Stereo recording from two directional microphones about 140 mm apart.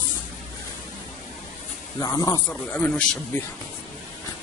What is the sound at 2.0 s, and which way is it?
Speech, 25° left (ahead or behind).